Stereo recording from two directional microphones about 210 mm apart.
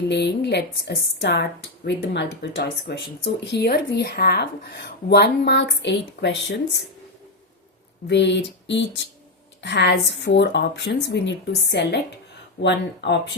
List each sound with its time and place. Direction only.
0.1 s speech: 55° left (ahead or behind)
8.0 s speech: 55° left (ahead or behind)